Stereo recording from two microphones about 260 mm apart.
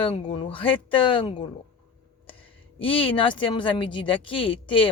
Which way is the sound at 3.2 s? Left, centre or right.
Centre.